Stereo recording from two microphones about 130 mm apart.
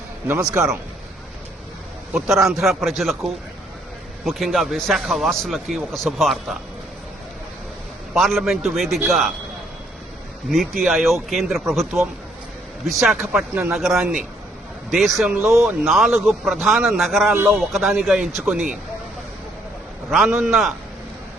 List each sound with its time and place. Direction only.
0.6 s speech: 15° right (ahead or behind)
2.1 s a man's voice: centre (ahead or behind)
8.1 s a man's voice: centre (ahead or behind)
10.5 s a man's voice: centre (ahead or behind)
20.1 s a man's voice: centre (ahead or behind)